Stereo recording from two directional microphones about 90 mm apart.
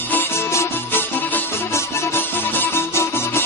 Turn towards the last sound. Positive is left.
turn(degrees=25)  # may be behind; listen again after turning